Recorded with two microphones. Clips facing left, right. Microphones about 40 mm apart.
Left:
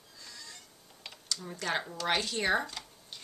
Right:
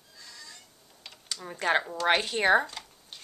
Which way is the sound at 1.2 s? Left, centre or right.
Right.